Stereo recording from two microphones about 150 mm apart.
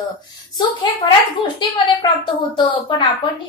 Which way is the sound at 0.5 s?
30° left (ahead or behind).